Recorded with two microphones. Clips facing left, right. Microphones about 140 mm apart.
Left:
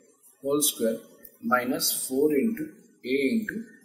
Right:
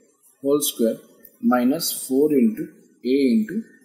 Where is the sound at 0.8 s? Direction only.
20° right (ahead or behind).